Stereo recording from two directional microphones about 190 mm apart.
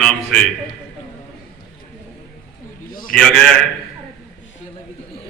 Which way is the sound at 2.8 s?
50° left (ahead or behind).